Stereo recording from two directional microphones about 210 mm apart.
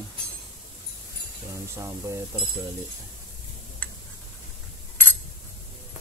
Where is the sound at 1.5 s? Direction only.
15° right (ahead or behind).